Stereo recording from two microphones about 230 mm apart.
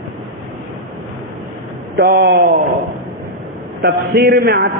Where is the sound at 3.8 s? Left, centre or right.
Right.